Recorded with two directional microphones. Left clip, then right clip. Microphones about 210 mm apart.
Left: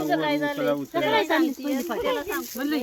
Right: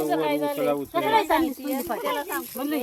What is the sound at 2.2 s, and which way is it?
Speech, 30° left (ahead or behind).